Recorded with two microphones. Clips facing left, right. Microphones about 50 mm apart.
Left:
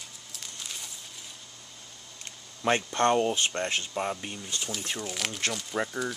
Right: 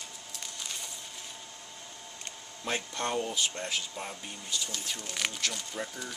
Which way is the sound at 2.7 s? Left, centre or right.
Left.